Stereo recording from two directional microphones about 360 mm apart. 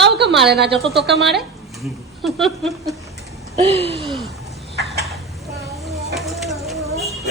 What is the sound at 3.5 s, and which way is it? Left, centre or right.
Speech, centre.